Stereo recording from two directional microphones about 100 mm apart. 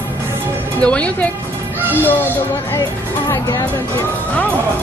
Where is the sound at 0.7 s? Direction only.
10° left (ahead or behind).